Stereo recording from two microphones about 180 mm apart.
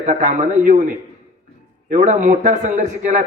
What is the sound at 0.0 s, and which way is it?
Speech, 45° right (ahead or behind).